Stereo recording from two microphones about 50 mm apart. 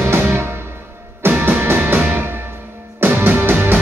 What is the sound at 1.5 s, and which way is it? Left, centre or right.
Music, right.